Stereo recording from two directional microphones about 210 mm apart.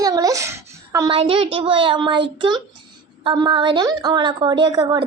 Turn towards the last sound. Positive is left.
turn(degrees=-20)  # may be behind; listen again after turning